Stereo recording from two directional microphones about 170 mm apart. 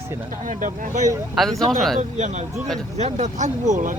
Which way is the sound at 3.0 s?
40° right (ahead or behind).